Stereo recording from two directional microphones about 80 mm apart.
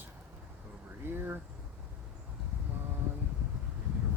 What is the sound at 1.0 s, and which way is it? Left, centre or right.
Speech, right.